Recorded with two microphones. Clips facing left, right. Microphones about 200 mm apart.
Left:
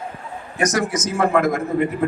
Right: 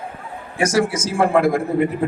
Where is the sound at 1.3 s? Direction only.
30° right (ahead or behind).